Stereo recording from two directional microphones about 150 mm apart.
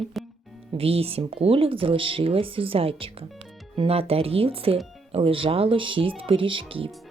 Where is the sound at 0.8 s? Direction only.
40° right (ahead or behind).